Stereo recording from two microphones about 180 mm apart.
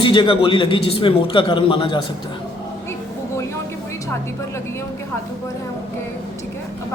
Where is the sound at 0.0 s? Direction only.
25° left (ahead or behind).